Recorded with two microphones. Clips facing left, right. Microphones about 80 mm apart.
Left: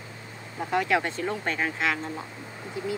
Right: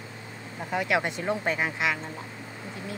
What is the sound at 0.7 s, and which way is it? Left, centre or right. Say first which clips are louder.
Speech: left 2 dB; centre.